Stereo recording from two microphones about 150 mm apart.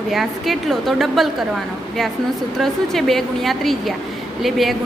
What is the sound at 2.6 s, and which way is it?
A woman's voice, centre (ahead or behind).